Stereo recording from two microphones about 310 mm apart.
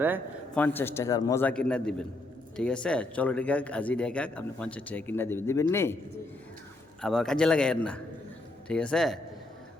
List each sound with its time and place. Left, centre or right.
0.0 s a man's voice: centre
0.6 s a man's voice: centre
7.0 s speech: centre